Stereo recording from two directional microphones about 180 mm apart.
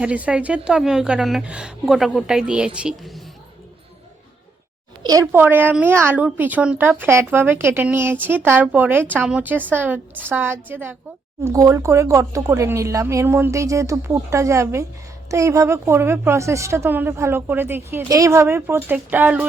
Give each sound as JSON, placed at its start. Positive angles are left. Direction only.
{"t": 0.0, "sound": "a woman's voice", "side_deg": -5}
{"t": 5.0, "sound": "a woman's voice", "side_deg": -15}